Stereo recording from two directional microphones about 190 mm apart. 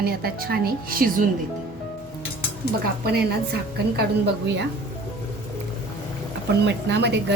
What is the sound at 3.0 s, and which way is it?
A woman's voice, 60° right (ahead or behind).